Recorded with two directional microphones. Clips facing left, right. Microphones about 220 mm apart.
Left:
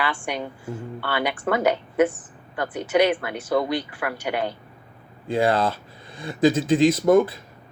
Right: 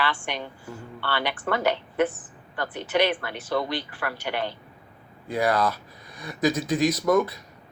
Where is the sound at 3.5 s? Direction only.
20° left (ahead or behind).